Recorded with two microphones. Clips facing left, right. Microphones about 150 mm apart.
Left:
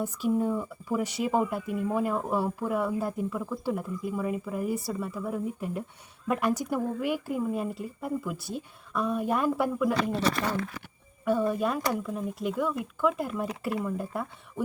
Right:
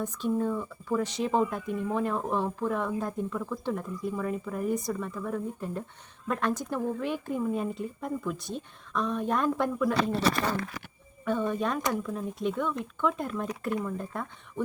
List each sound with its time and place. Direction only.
0.0 s speech: 10° left (ahead or behind)
10.2 s speech: 85° right
11.3 s speech: 5° left (ahead or behind)